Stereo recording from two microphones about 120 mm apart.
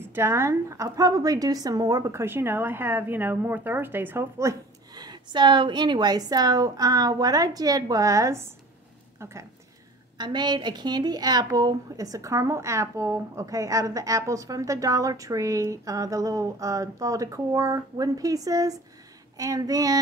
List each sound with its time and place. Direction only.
0.1 s a woman's voice: 20° right (ahead or behind)
10.1 s a woman's voice: 40° right (ahead or behind)